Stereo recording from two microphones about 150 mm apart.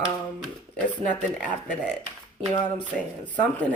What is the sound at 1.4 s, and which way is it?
Speech, 55° right (ahead or behind).